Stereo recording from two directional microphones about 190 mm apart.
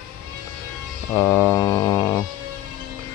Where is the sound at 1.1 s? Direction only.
15° left (ahead or behind).